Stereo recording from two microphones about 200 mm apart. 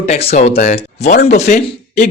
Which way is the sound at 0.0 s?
30° left (ahead or behind).